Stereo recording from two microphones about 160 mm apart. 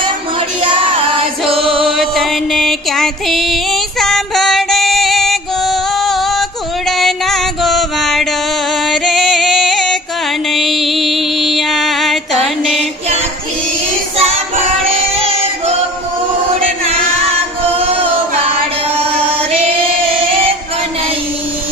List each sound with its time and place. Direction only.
1.2 s music: 35° right (ahead or behind)
1.6 s music: centre (ahead or behind)
14.2 s child singing: 40° right (ahead or behind)